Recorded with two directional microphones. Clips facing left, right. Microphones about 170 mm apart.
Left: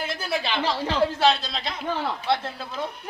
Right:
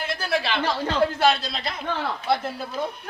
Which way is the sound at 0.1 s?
Centre (ahead or behind).